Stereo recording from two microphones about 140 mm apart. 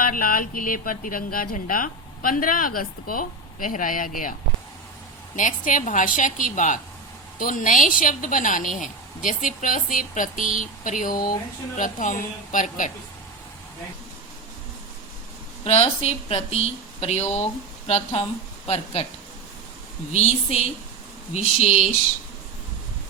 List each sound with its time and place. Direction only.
0.0 s speech: 90° left
5.4 s a woman's voice: 70° left (ahead or behind)
15.6 s speech: 50° left (ahead or behind)
21.3 s speech: 50° left (ahead or behind)